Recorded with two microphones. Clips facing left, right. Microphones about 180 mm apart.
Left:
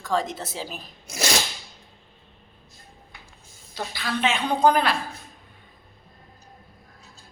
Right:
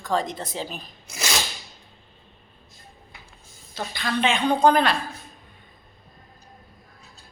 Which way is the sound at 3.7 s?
5° left (ahead or behind).